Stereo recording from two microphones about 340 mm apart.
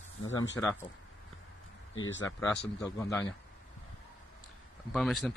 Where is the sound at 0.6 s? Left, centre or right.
Centre.